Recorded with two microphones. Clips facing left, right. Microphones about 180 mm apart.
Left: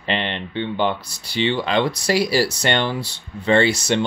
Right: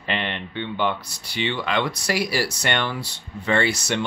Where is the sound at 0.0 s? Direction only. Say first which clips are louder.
Left 3 dB; 25° left (ahead or behind).